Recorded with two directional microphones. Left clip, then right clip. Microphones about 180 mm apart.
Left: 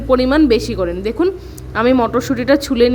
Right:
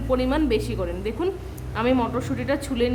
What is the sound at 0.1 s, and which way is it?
A woman's voice, 40° left (ahead or behind).